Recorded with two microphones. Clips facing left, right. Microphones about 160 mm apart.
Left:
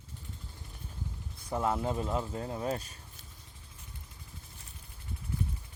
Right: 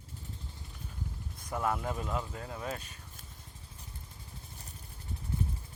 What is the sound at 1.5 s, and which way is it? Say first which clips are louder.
Speech: left 2 dB; 25° left (ahead or behind).